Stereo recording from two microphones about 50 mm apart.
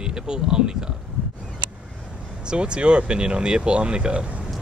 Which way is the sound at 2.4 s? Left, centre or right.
Centre.